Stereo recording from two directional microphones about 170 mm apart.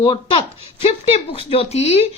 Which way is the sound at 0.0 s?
30° left (ahead or behind).